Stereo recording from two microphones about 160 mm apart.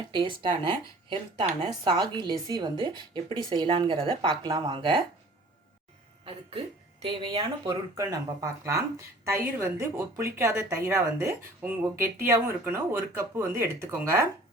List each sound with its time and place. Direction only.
0.1 s speech: 30° right (ahead or behind)
7.0 s speech: 30° right (ahead or behind); by 14.3 s 15° right (ahead or behind)